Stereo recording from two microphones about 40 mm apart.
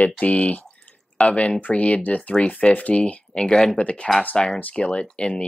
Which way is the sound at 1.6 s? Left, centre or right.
Left.